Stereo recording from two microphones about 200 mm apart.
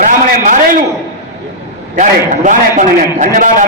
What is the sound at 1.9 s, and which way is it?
A man's voice, 40° right (ahead or behind).